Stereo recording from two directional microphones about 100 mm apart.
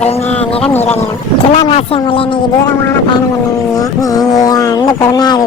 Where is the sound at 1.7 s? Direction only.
65° left (ahead or behind).